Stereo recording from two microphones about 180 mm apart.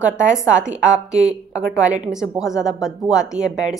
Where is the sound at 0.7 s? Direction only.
40° right (ahead or behind).